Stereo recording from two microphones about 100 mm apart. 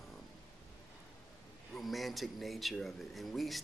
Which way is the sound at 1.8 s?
Centre (ahead or behind).